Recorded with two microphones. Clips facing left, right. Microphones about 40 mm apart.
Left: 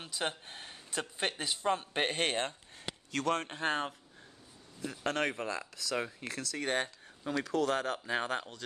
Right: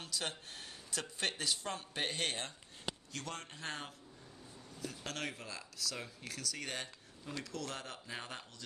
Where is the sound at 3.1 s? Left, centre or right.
Left.